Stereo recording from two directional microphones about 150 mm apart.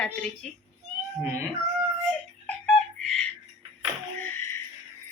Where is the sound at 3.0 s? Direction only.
Centre (ahead or behind).